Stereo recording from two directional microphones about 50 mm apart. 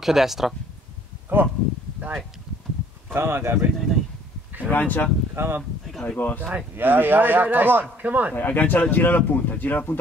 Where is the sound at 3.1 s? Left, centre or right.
Right.